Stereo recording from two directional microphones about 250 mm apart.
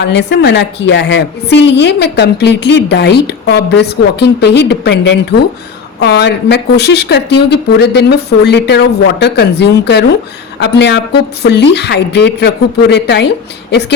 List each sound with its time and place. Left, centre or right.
0.0 s a woman's voice: left